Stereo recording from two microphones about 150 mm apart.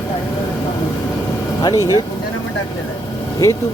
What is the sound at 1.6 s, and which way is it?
Speech, 25° left (ahead or behind).